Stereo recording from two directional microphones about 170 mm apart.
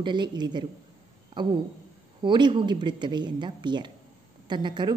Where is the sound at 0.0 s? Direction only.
25° right (ahead or behind).